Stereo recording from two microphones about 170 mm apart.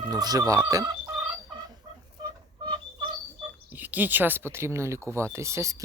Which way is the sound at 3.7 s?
10° right (ahead or behind).